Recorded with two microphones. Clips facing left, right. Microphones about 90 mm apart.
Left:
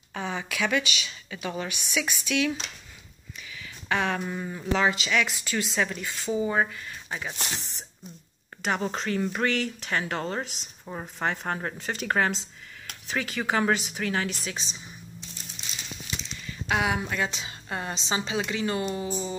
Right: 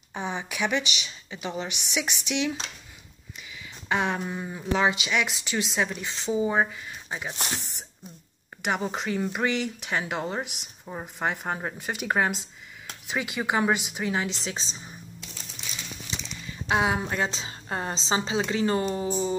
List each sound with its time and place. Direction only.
0.1 s speech: 25° right (ahead or behind)
3.5 s speech: 15° right (ahead or behind)
8.6 s speech: 15° right (ahead or behind); by 14.8 s 30° right (ahead or behind)
16.4 s a woman's voice: 25° right (ahead or behind)